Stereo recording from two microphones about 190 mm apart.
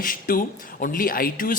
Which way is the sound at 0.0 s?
45° left (ahead or behind).